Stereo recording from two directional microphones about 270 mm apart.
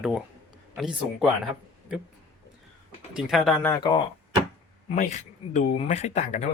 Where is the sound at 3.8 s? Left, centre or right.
Centre.